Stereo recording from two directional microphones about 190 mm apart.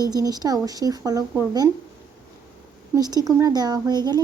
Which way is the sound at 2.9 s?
20° right (ahead or behind).